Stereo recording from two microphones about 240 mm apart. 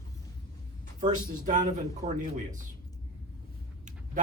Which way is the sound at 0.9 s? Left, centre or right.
Right.